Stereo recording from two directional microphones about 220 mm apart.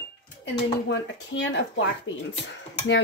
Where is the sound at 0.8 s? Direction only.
55° left (ahead or behind).